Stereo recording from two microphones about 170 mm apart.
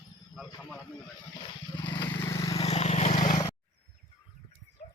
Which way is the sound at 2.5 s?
35° left (ahead or behind).